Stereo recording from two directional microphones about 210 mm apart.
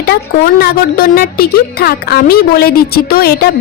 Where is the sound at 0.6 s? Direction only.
45° left (ahead or behind).